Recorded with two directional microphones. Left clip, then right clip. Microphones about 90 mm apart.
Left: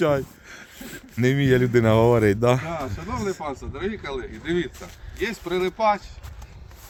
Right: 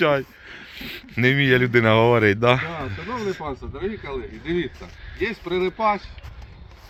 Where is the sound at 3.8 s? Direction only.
30° left (ahead or behind).